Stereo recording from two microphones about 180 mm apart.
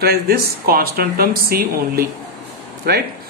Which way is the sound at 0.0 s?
60° right (ahead or behind).